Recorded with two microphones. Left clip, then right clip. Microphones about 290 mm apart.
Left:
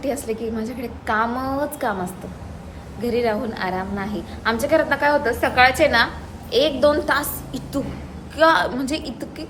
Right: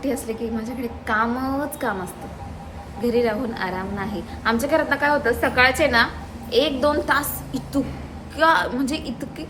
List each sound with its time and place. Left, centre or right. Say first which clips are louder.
0.0 s a woman's voice: left 1 dB; centre
3.0 s a woman's voice: even; centre